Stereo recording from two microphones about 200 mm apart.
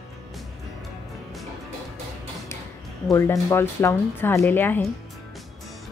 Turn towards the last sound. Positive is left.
turn(degrees=10)  # may be behind; listen again after turning